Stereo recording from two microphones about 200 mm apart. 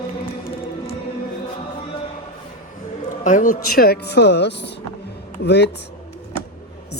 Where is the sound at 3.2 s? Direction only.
40° left (ahead or behind); by 5.7 s 55° left (ahead or behind).